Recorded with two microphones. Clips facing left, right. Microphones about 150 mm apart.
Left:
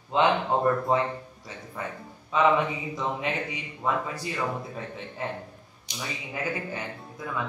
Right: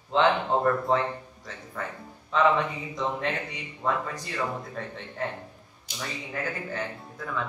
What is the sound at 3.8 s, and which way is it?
Speech, 10° left (ahead or behind).